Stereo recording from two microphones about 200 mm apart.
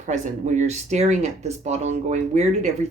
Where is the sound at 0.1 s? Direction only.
35° right (ahead or behind).